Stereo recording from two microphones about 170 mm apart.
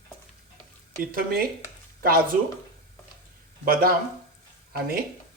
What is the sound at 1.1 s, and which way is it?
Speech, 60° right (ahead or behind).